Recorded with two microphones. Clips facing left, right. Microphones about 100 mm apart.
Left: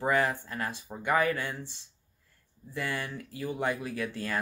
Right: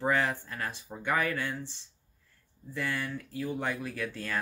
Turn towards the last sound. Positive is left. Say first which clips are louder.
# left 2 dB
turn(degrees=15)  # may be behind; listen again after turning